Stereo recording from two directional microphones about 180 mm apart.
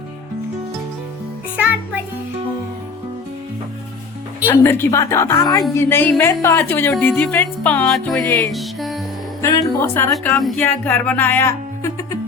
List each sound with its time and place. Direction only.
4.4 s music: 15° left (ahead or behind)
9.4 s music: 15° left (ahead or behind)
10.6 s speech: 10° left (ahead or behind)